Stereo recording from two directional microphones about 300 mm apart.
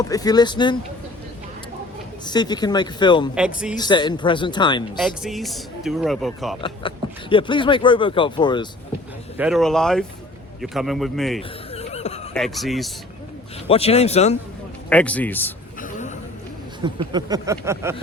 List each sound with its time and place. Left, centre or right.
0.0 s speech: centre
2.2 s speech: centre
3.3 s speech: centre
3.8 s speech: centre
4.9 s speech: centre
6.6 s speech: centre
9.4 s speech: centre
11.7 s a sound: left
12.3 s speech: centre
13.7 s speech: centre
14.8 s speech: centre
15.8 s a sound: left
16.8 s speech: centre